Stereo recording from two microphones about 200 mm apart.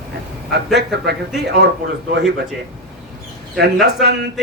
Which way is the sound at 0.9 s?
55° right (ahead or behind).